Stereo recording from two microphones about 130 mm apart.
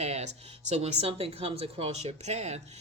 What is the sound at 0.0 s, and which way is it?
Speech, 55° right (ahead or behind).